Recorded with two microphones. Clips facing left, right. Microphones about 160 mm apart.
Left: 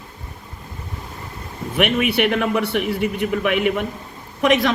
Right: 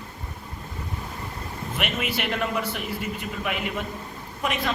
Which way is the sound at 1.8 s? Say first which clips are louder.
Left 11 dB; 65° left (ahead or behind).